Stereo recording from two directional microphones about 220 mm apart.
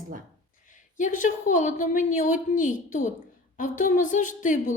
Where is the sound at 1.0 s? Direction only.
35° left (ahead or behind).